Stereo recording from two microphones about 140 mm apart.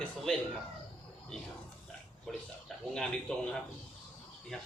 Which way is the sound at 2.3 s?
5° left (ahead or behind).